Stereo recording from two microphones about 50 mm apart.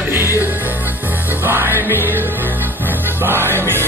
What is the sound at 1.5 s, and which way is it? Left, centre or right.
Music, right.